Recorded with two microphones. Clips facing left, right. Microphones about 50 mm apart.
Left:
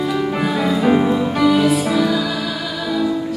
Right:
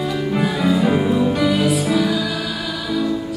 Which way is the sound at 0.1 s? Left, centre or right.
Centre.